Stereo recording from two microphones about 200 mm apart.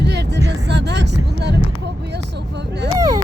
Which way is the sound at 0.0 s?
60° right (ahead or behind).